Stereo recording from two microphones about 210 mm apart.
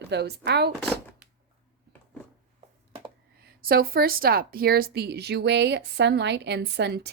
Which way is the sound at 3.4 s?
45° right (ahead or behind).